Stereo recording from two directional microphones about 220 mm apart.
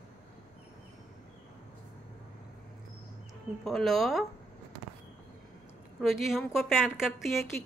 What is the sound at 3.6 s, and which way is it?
Speech, centre (ahead or behind).